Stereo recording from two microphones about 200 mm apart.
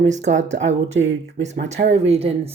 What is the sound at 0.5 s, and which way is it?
Speech, 65° right (ahead or behind).